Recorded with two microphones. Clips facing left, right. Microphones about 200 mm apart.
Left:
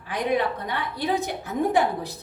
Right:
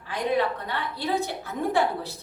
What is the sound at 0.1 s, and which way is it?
A woman's voice, 15° left (ahead or behind).